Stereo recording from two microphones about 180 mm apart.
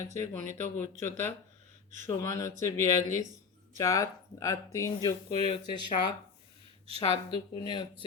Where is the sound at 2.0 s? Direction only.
20° left (ahead or behind).